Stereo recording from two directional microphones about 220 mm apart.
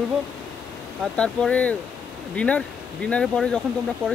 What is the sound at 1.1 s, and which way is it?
Speech, 5° left (ahead or behind).